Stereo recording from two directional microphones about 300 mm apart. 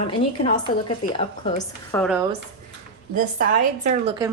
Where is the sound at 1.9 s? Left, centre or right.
Centre.